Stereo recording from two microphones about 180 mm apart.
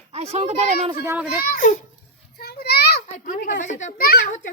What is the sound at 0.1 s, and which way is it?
Speech, 35° right (ahead or behind).